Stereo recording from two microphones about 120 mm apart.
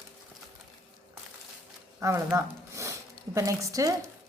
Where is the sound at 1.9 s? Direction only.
20° right (ahead or behind).